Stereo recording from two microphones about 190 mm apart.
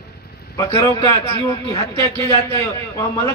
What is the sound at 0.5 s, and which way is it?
A man's voice, 15° left (ahead or behind).